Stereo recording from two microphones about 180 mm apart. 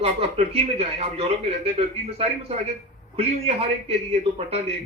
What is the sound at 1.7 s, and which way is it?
Speech, 35° right (ahead or behind).